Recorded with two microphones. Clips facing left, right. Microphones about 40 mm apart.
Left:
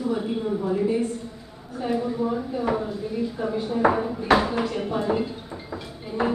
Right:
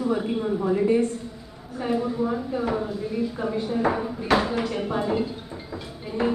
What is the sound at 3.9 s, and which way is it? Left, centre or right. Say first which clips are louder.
Speech: left 2 dB; centre.